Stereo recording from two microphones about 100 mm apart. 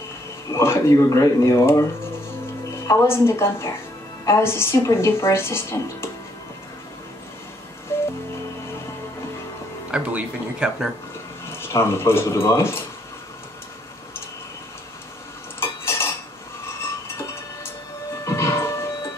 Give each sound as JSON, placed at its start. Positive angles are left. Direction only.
{"t": 0.5, "sound": "speech", "side_deg": 25}
{"t": 2.9, "sound": "speech", "side_deg": 25}
{"t": 7.9, "sound": "music", "side_deg": 25}
{"t": 9.8, "sound": "speech", "side_deg": -10}
{"t": 11.4, "sound": "speech", "side_deg": 25}
{"t": 15.6, "sound": "cutlery", "side_deg": 25}
{"t": 18.2, "sound": "music", "side_deg": 30}